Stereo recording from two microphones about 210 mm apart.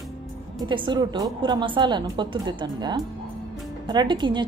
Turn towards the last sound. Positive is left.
turn(degrees=-20)  # may be behind; listen again after turning